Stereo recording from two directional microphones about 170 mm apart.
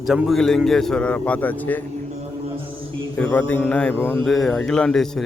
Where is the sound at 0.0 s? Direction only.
Centre (ahead or behind).